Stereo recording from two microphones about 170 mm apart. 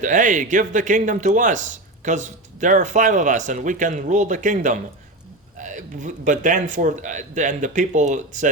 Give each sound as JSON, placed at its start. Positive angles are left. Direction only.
{"t": 0.0, "sound": "speech", "side_deg": -50}